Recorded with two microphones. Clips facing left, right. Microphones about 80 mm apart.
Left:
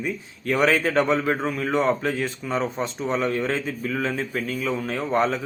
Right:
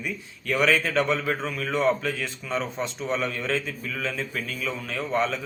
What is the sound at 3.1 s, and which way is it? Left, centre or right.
A man's voice, left.